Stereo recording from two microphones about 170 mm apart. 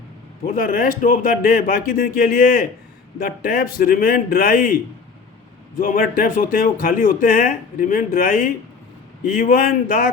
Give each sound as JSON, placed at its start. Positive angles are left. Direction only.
{"t": 0.4, "sound": "a man's voice", "side_deg": 55}
{"t": 5.8, "sound": "a man's voice", "side_deg": 55}